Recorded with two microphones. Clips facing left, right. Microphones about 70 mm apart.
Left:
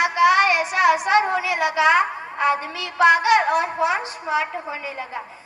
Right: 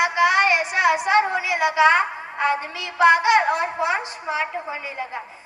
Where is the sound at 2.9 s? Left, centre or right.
Right.